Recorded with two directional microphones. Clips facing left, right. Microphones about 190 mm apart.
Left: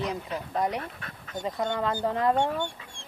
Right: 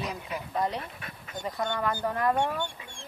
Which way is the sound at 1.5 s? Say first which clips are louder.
Left 2 dB; 20° left (ahead or behind).